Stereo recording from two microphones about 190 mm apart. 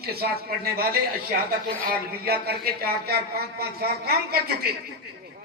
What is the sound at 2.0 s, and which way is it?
Speech, 55° right (ahead or behind).